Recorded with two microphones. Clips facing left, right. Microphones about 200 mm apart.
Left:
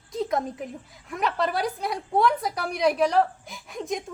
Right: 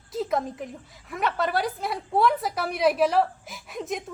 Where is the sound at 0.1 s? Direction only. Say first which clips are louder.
Even; centre (ahead or behind).